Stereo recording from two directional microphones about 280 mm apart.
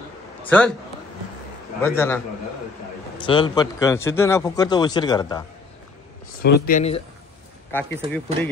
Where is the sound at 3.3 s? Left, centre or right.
Centre.